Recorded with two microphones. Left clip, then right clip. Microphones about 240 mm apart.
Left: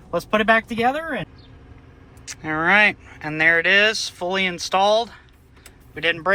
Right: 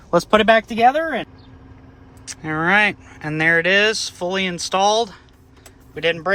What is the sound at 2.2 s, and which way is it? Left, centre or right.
Speech, centre.